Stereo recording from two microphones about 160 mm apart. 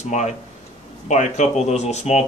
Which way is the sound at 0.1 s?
45° left (ahead or behind).